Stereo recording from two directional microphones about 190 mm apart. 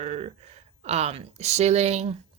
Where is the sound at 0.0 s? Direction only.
35° right (ahead or behind).